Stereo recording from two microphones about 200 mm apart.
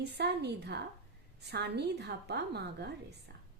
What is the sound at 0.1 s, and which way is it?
A woman's voice, 55° right (ahead or behind).